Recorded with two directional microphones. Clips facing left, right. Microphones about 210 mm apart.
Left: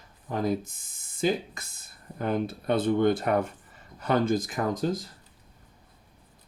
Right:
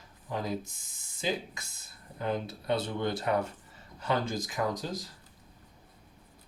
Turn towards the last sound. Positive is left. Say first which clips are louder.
# left 5 dB
turn(degrees=55)  # may be behind; listen again after turning